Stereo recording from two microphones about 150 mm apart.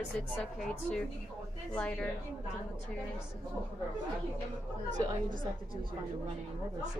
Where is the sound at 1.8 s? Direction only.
5° left (ahead or behind).